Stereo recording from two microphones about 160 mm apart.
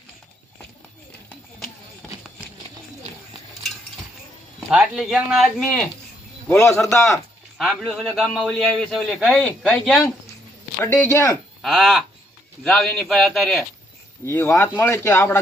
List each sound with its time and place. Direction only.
1.5 s a sound: centre (ahead or behind)
4.7 s a man's voice: 5° right (ahead or behind)
6.5 s speech: 15° left (ahead or behind)
7.6 s a man's voice: centre (ahead or behind)
10.8 s speech: 15° left (ahead or behind)
11.6 s a man's voice: centre (ahead or behind)
14.3 s speech: 15° left (ahead or behind)